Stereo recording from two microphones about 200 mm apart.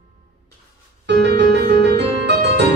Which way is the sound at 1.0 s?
55° right (ahead or behind).